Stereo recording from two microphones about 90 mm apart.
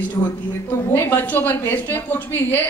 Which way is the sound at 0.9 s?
25° left (ahead or behind).